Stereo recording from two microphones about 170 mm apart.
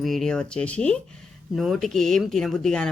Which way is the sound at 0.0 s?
Centre (ahead or behind).